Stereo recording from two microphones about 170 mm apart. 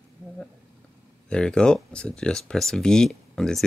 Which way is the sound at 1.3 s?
5° left (ahead or behind).